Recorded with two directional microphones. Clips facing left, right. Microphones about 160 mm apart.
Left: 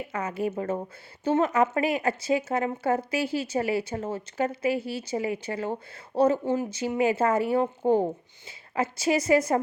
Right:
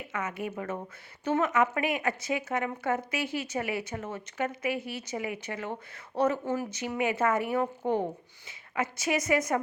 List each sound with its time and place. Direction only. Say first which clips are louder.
0.1 s a woman's voice: left 4 dB; 35° left (ahead or behind)